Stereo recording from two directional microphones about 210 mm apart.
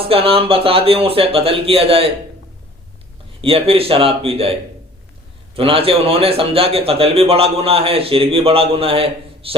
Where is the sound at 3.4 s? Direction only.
25° right (ahead or behind).